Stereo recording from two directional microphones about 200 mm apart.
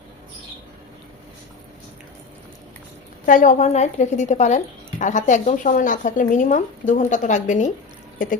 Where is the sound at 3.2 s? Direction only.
40° left (ahead or behind).